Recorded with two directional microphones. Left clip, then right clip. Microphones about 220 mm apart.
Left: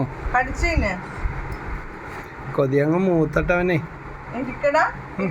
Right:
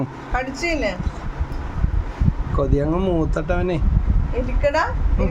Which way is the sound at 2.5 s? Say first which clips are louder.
Left 2 dB; 5° right (ahead or behind).